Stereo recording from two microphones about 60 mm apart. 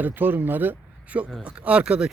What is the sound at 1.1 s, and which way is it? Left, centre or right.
Speech, centre.